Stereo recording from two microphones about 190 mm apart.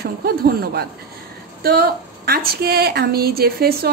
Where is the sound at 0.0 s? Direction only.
55° right (ahead or behind).